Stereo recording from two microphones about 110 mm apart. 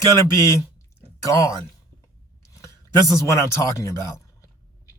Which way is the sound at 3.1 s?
25° left (ahead or behind).